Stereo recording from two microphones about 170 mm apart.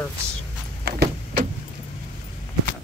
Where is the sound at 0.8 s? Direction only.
70° right (ahead or behind).